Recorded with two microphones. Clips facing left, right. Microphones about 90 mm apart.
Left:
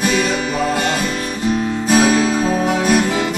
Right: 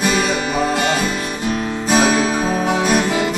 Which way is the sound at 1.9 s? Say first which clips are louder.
Left 1 dB; 20° right (ahead or behind).